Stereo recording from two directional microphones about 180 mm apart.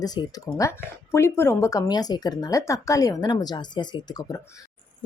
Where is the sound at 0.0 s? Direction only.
20° left (ahead or behind).